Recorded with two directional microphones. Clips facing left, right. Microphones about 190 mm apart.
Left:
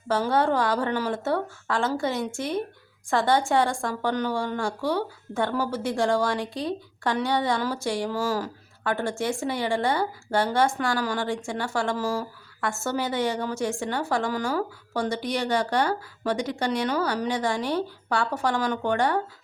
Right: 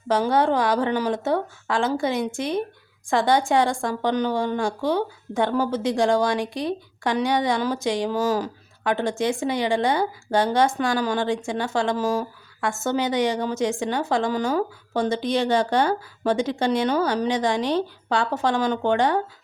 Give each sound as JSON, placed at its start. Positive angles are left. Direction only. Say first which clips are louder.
{"t": 0.1, "sound": "a woman's voice", "louder": "right 3 dB", "side_deg": -15}